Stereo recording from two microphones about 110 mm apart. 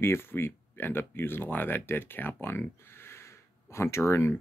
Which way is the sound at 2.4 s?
20° left (ahead or behind).